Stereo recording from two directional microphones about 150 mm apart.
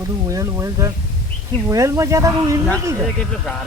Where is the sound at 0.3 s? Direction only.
20° right (ahead or behind).